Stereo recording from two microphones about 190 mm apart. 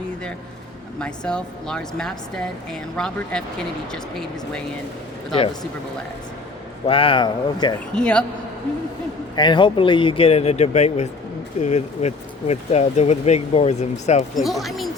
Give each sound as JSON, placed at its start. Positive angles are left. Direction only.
{"t": 0.9, "sound": "speech", "side_deg": 5}
{"t": 6.8, "sound": "speech", "side_deg": 30}
{"t": 7.9, "sound": "speech", "side_deg": 5}
{"t": 9.3, "sound": "speech", "side_deg": 25}
{"t": 14.3, "sound": "speech", "side_deg": 0}